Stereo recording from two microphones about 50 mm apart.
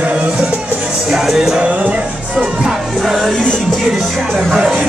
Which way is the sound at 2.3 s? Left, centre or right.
Centre.